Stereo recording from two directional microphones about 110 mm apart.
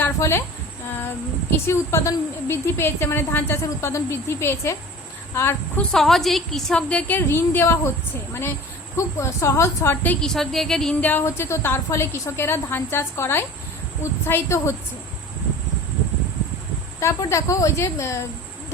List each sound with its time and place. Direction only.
0.0 s insect: 20° left (ahead or behind)
1.5 s a woman's voice: 25° left (ahead or behind)
5.7 s a woman's voice: 5° left (ahead or behind)
11.1 s a woman's voice: 25° left (ahead or behind)
17.0 s a woman's voice: 25° left (ahead or behind)